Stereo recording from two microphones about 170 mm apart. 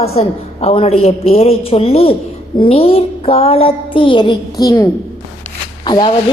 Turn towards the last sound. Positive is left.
turn(degrees=25)  # may be behind; listen again after turning